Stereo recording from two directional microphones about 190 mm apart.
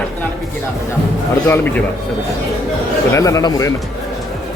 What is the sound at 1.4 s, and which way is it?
Speech, 10° left (ahead or behind).